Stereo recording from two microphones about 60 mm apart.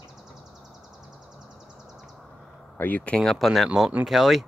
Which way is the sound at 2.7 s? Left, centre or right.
Left.